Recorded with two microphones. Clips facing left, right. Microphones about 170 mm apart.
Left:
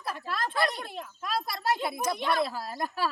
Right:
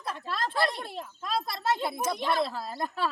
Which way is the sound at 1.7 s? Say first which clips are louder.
Even; centre (ahead or behind).